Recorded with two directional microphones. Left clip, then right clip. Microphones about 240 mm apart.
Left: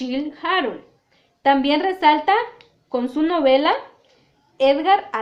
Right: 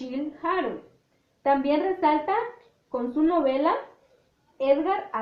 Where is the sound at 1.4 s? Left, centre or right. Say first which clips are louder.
Left 5 dB; left.